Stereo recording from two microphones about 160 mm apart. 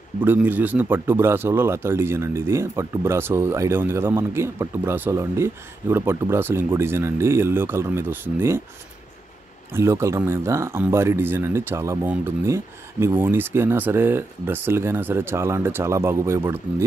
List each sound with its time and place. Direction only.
0.2 s speech: 10° right (ahead or behind)
9.7 s speech: 15° right (ahead or behind)